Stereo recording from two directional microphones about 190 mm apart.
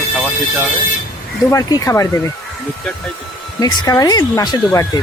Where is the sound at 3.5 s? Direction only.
20° left (ahead or behind).